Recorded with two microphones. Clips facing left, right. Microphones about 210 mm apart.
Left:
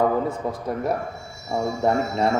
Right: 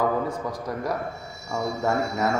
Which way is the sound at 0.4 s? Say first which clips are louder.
Left 4 dB; 25° left (ahead or behind).